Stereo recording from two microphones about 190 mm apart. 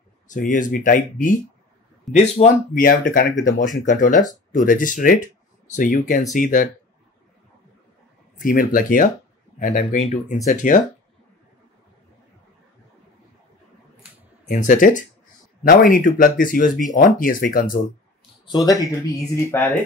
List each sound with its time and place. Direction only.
0.3 s speech: 40° left (ahead or behind)
8.4 s speech: 45° left (ahead or behind)
14.5 s speech: 45° left (ahead or behind)
18.5 s speech: 20° left (ahead or behind)